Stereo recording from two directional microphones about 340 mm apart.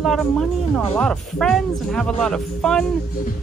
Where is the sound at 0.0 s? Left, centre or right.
Centre.